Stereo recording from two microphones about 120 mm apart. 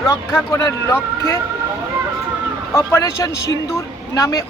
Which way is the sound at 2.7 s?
25° left (ahead or behind).